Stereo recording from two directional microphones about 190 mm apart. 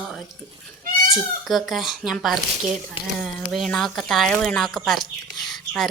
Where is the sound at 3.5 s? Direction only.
Centre (ahead or behind).